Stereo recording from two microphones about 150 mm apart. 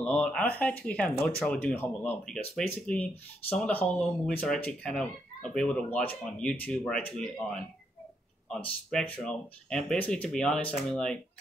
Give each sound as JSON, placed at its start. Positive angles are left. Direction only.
{"t": 0.0, "sound": "speech", "side_deg": 5}